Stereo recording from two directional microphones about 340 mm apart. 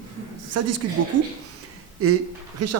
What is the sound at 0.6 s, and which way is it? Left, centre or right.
Speech, right.